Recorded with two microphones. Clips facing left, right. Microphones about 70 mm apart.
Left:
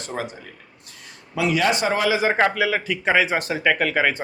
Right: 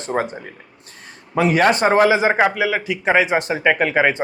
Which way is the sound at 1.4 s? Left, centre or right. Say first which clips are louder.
Right 5 dB; right.